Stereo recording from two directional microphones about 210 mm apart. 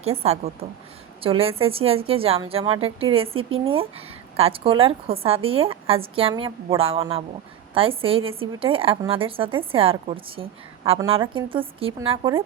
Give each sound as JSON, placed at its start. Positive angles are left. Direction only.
{"t": 0.0, "sound": "a woman's voice", "side_deg": -30}